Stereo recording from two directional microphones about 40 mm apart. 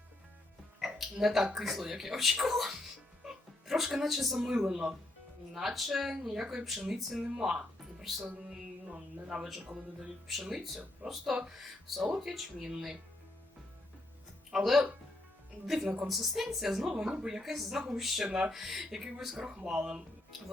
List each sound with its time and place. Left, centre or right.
1.2 s a woman's voice: centre
2.4 s music: centre
4.4 s speech: centre
5.5 s speech: centre
9.3 s speech: centre
10.2 s a woman's voice: centre
10.5 s speech: right
14.5 s a woman's voice: centre
17.0 s speech: centre
17.4 s a woman's voice: centre